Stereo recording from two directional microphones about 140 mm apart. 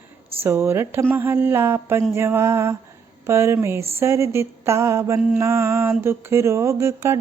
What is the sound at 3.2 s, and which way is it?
Speech, 20° right (ahead or behind).